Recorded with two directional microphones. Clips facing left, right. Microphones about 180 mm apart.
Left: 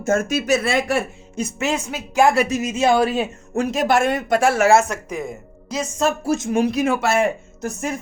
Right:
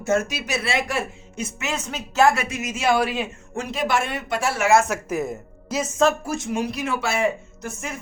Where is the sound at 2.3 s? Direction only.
35° left (ahead or behind).